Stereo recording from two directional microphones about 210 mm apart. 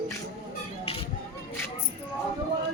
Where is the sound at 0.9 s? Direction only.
25° left (ahead or behind).